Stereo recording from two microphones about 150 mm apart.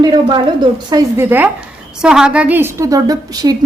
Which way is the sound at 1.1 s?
15° right (ahead or behind).